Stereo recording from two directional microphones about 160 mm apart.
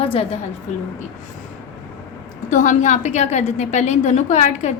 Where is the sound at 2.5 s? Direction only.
50° left (ahead or behind).